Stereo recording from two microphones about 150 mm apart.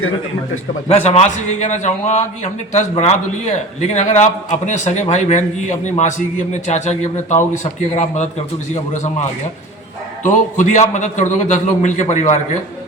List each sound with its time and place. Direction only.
0.9 s a man's voice: 45° left (ahead or behind)
10.2 s a man's voice: 55° left (ahead or behind)